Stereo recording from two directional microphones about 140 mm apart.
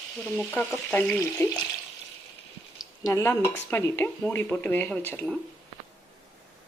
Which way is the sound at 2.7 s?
20° left (ahead or behind).